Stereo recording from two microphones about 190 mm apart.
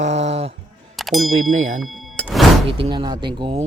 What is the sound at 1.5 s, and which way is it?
Speech, 90° right.